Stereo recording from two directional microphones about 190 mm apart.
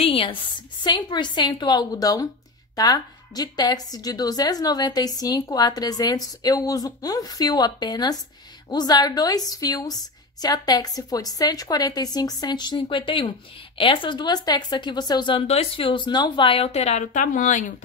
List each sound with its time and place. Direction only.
0.0 s a woman's voice: 30° left (ahead or behind)